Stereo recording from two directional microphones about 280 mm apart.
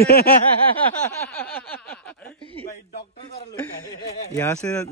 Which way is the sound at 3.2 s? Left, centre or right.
Centre.